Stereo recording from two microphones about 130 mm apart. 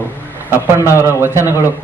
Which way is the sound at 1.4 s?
25° left (ahead or behind).